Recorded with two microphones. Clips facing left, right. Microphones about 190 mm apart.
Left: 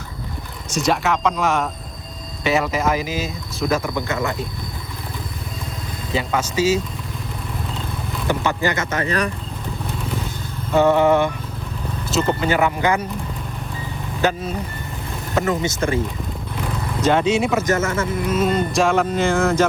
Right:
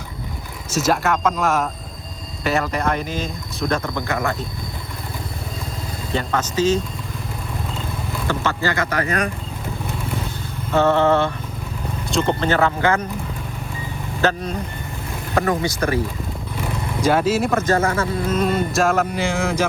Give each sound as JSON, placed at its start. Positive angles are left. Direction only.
{"t": 0.7, "sound": "speech", "side_deg": 0}
{"t": 3.9, "sound": "speech", "side_deg": 20}
{"t": 6.1, "sound": "speech", "side_deg": 10}
{"t": 8.3, "sound": "speech", "side_deg": 20}
{"t": 10.8, "sound": "speech", "side_deg": 15}
{"t": 14.2, "sound": "speech", "side_deg": 10}
{"t": 17.0, "sound": "speech", "side_deg": -5}
{"t": 17.5, "sound": "speech", "side_deg": 15}
{"t": 18.3, "sound": "speech", "side_deg": 0}